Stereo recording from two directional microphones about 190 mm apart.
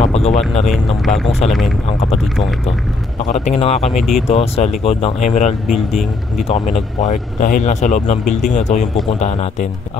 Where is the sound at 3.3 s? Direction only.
35° left (ahead or behind).